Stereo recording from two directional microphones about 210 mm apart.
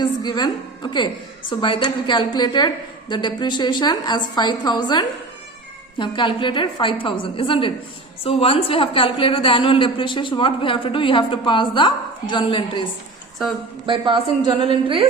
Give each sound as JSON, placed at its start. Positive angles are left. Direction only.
{"t": 0.0, "sound": "a woman's voice", "side_deg": 20}
{"t": 13.8, "sound": "a woman's voice", "side_deg": -25}